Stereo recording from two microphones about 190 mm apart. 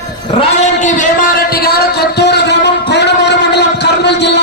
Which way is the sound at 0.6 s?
40° left (ahead or behind).